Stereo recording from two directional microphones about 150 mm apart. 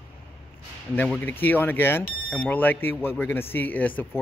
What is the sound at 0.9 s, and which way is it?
Speech, 10° left (ahead or behind).